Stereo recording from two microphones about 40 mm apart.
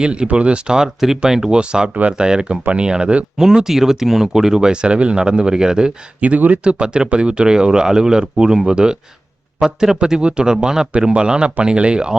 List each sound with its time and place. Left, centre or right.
0.0 s speech: right
0.9 s speech: centre
3.3 s speech: centre
6.1 s speech: right
6.7 s speech: right
9.6 s speech: centre
10.0 s speech: right